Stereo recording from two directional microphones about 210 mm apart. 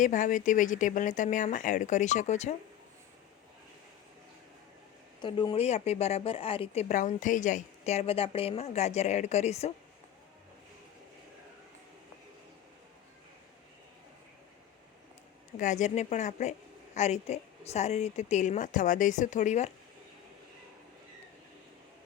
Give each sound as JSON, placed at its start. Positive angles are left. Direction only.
{"t": 0.0, "sound": "a woman's voice", "side_deg": 35}
{"t": 5.2, "sound": "a woman's voice", "side_deg": 20}
{"t": 15.5, "sound": "a woman's voice", "side_deg": 35}